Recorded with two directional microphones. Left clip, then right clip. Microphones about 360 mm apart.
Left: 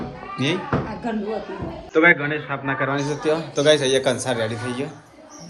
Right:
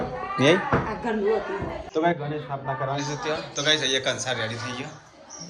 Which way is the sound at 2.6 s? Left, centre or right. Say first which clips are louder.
Left 5 dB; centre.